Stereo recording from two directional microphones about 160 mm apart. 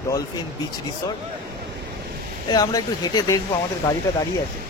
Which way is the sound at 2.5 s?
25° left (ahead or behind).